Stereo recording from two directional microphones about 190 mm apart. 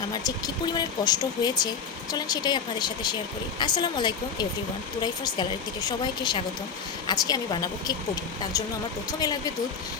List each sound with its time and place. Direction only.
0.1 s speech: 20° left (ahead or behind)